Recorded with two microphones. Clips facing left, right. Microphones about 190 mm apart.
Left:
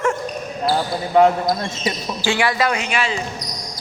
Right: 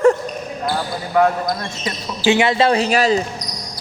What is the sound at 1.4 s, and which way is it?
Speech, 15° left (ahead or behind).